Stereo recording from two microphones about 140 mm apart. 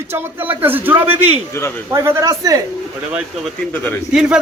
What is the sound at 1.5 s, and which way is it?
Speech, 20° left (ahead or behind).